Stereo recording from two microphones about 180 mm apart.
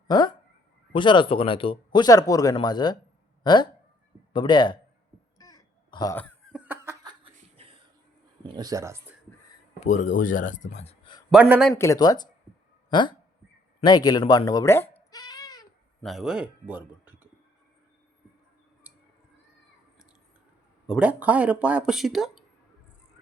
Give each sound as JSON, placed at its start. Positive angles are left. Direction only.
{"t": 0.1, "sound": "speech", "side_deg": 25}
{"t": 5.4, "sound": "throat clearing", "side_deg": 20}
{"t": 6.5, "sound": "snicker", "side_deg": -10}
{"t": 8.4, "sound": "speech", "side_deg": -20}
{"t": 9.8, "sound": "speech", "side_deg": 40}
{"t": 11.3, "sound": "speech", "side_deg": -10}
{"t": 11.7, "sound": "speech", "side_deg": 15}
{"t": 15.1, "sound": "a sound", "side_deg": 20}
{"t": 16.0, "sound": "speech", "side_deg": 0}
{"t": 20.8, "sound": "speech", "side_deg": -5}